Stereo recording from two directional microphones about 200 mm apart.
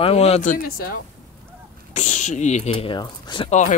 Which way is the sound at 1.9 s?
35° left (ahead or behind).